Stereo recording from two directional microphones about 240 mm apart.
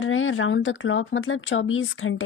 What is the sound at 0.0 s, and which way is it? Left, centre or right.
Speech, left.